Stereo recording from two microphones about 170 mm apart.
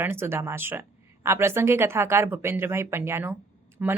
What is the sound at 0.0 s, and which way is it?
Speech, 15° right (ahead or behind).